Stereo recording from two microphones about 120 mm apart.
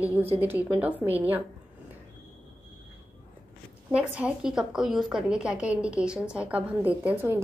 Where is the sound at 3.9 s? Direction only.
10° right (ahead or behind).